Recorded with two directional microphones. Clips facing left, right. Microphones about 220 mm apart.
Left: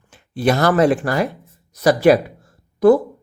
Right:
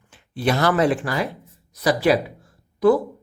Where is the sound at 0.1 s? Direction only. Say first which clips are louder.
Left 4 dB; 45° left (ahead or behind).